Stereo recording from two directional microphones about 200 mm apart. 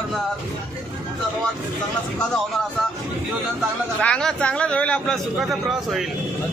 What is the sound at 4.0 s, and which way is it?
A man's voice, 5° left (ahead or behind).